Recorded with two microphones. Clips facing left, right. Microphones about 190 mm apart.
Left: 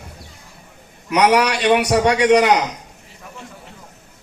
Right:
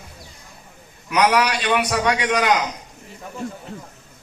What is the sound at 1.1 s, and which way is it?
Speech, 65° left (ahead or behind).